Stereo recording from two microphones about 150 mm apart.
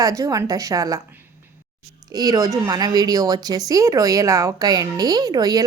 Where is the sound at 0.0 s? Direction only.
20° right (ahead or behind).